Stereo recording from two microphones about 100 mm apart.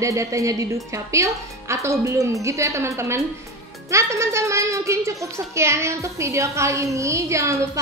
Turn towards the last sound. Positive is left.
turn(degrees=-30)  # may be behind; listen again after turning